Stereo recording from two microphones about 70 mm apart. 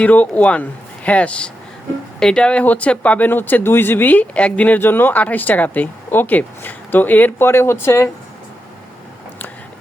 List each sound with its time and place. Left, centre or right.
0.0 s speech: left